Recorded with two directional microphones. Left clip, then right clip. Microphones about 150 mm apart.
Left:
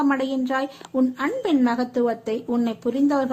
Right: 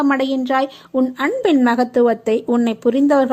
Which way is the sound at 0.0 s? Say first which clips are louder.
Right 5 dB; 35° right (ahead or behind).